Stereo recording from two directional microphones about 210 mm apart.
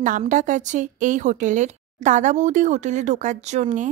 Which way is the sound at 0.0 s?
35° right (ahead or behind).